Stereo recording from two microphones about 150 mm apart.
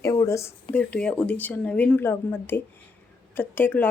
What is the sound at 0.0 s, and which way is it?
Speech, 20° left (ahead or behind).